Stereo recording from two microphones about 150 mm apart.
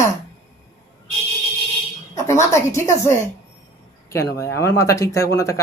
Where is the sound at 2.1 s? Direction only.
20° left (ahead or behind).